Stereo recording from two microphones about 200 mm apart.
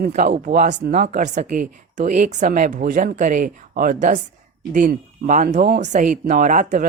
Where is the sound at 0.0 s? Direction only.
40° right (ahead or behind).